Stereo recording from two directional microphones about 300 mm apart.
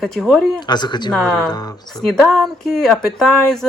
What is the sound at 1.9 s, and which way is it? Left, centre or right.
A woman's voice, centre.